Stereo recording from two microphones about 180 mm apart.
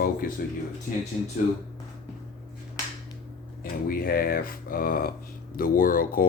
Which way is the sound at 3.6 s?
55° left (ahead or behind).